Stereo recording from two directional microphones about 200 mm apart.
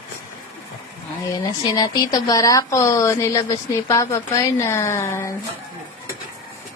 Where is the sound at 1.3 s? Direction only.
20° left (ahead or behind).